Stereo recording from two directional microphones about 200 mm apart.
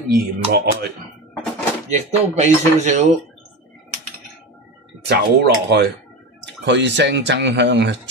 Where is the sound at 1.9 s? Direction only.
35° right (ahead or behind).